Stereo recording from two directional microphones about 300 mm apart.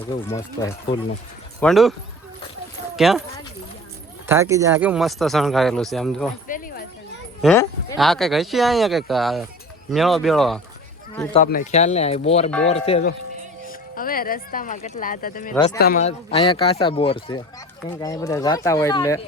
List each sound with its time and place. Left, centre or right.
0.6 s speech: centre
1.6 s speech: centre
4.3 s speech: centre
7.4 s sheep: centre
7.9 s speech: centre
11.3 s speech: left
15.5 s speech: centre
15.8 s speech: left; by 19.2 s centre